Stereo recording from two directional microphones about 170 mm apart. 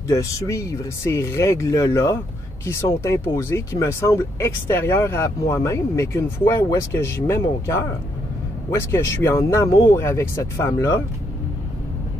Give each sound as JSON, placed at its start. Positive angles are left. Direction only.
{"t": 0.1, "sound": "speech", "side_deg": 20}